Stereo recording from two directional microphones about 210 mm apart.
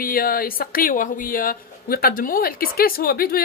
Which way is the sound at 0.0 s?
45° left (ahead or behind).